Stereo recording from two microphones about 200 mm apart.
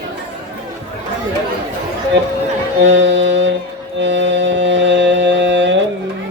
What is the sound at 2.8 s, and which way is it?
Music, 60° right (ahead or behind).